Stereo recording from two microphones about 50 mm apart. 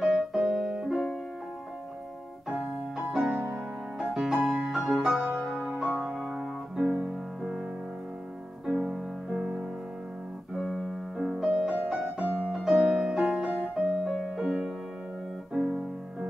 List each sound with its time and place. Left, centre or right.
0.0 s piano: centre
0.7 s music: centre
3.1 s music: centre
8.6 s music: centre
10.6 s keyboard: centre
10.9 s music: centre
15.5 s keyboard: centre